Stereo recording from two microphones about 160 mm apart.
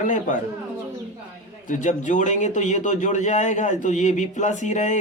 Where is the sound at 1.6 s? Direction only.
50° left (ahead or behind).